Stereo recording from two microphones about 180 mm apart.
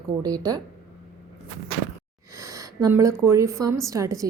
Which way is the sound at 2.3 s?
15° right (ahead or behind).